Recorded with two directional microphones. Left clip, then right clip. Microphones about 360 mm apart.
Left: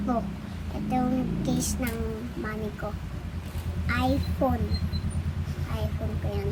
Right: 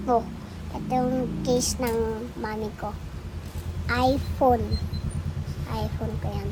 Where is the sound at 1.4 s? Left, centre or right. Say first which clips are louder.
Right 6 dB; centre.